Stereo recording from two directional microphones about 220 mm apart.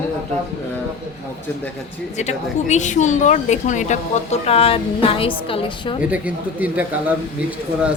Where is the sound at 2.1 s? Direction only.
30° left (ahead or behind).